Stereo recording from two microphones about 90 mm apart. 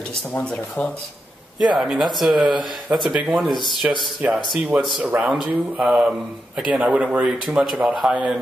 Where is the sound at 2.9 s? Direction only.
25° right (ahead or behind).